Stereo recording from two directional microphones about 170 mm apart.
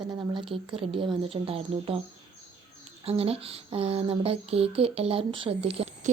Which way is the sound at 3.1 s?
35° right (ahead or behind).